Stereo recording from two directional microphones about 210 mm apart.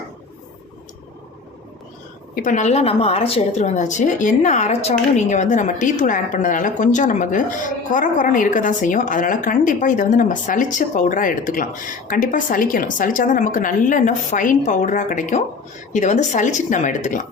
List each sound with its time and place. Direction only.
2.3 s a woman's voice: 40° left (ahead or behind)